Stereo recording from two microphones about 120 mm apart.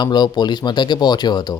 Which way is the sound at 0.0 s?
35° left (ahead or behind).